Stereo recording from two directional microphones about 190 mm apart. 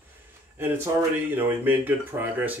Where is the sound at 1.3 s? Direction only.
10° right (ahead or behind).